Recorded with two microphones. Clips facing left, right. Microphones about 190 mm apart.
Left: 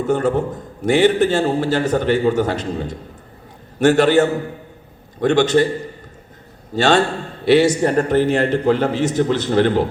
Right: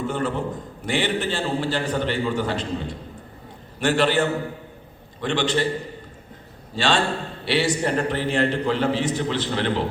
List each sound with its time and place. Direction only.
0.0 s a man's voice: 45° left (ahead or behind)
6.7 s a man's voice: 45° left (ahead or behind)